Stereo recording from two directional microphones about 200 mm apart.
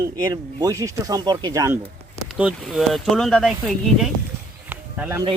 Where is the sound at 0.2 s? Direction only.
15° right (ahead or behind).